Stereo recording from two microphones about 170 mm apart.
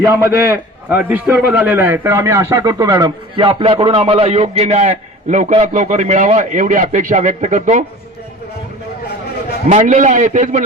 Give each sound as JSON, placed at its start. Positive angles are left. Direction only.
{"t": 0.0, "sound": "a man's voice", "side_deg": -15}
{"t": 3.4, "sound": "a man's voice", "side_deg": -35}
{"t": 9.6, "sound": "a man's voice", "side_deg": -45}